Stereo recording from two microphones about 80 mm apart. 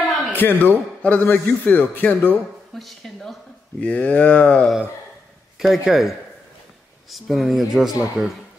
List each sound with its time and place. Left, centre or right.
0.3 s a man's voice: left
2.7 s speech: centre
3.8 s speech: centre
5.6 s speech: centre